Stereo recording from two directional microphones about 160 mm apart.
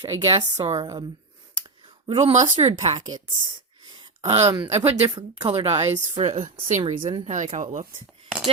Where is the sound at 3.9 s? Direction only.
25° right (ahead or behind).